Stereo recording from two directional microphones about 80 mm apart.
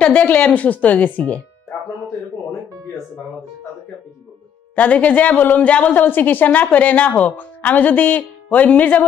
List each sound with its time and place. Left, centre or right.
0.0 s a woman's voice: centre
4.7 s a woman's voice: centre